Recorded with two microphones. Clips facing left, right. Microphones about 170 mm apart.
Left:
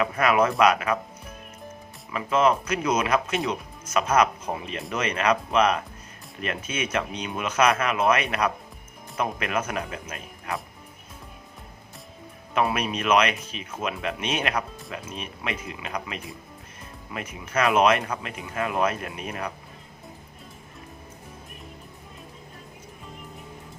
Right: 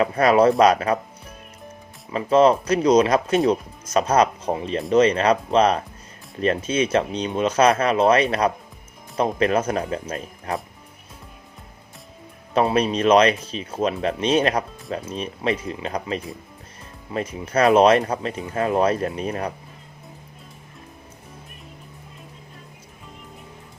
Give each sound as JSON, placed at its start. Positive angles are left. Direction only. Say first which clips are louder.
{"t": 0.0, "sound": "speech", "louder": "right 6 dB", "side_deg": -35}
{"t": 2.1, "sound": "speech", "louder": "right 6 dB", "side_deg": -35}
{"t": 12.5, "sound": "speech", "louder": "right 6 dB", "side_deg": -30}